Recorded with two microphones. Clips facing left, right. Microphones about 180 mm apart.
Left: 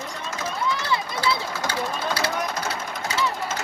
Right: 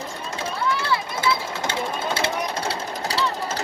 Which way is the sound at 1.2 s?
25° right (ahead or behind).